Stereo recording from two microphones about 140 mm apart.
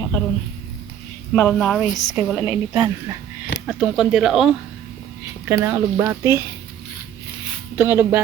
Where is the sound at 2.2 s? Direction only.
10° right (ahead or behind).